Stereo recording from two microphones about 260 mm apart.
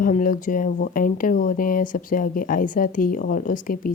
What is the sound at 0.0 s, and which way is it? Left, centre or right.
Speech, left.